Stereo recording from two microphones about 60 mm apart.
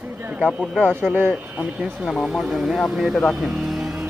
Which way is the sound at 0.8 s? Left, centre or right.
Right.